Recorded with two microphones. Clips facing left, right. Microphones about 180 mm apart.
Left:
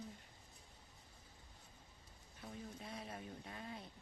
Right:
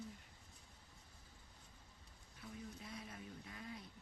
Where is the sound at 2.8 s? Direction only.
30° left (ahead or behind).